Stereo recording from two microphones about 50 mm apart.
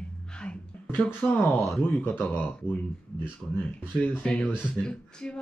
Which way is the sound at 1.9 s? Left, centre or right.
Left.